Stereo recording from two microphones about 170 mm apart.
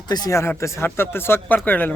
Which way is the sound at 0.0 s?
25° left (ahead or behind).